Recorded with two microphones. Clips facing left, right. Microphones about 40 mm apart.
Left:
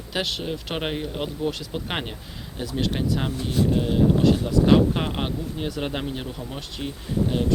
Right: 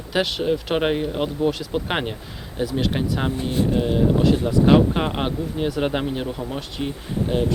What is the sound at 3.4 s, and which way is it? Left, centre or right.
Speech, right.